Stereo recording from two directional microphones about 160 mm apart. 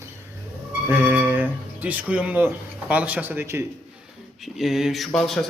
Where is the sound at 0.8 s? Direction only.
10° right (ahead or behind).